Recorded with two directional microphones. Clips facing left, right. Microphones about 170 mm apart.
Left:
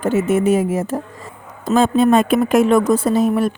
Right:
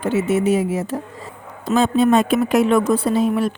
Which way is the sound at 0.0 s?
50° left (ahead or behind).